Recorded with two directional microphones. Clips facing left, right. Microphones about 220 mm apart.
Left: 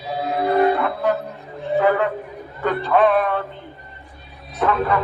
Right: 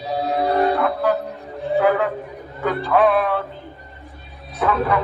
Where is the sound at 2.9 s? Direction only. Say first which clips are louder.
Even; centre (ahead or behind).